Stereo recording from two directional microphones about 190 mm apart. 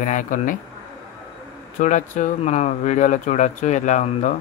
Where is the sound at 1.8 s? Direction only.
40° left (ahead or behind).